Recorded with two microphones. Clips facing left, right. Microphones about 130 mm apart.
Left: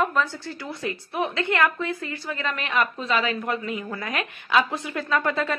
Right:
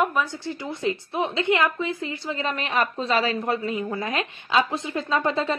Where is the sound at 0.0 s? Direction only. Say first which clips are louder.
Even; 10° right (ahead or behind).